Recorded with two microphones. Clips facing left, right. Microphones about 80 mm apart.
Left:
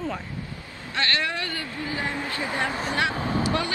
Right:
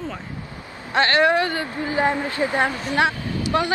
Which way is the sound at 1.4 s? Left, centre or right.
Right.